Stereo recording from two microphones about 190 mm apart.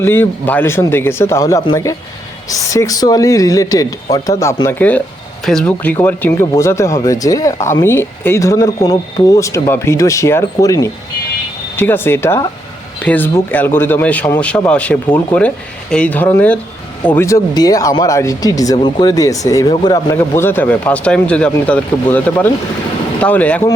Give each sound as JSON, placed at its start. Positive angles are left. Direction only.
{"t": 0.0, "sound": "speech", "side_deg": 10}